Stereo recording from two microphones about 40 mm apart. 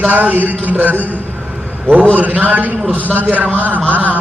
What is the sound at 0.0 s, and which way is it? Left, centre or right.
Speech, right.